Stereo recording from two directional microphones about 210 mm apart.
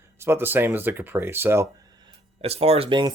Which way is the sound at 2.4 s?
30° right (ahead or behind).